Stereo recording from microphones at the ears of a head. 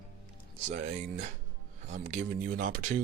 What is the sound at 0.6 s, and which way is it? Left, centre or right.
Speech, right.